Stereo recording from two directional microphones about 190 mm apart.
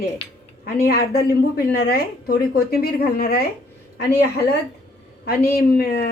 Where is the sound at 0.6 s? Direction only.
55° left (ahead or behind).